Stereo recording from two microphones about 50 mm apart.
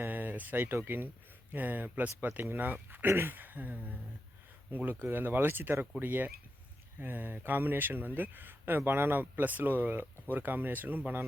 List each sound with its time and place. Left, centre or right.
0.0 s speech: right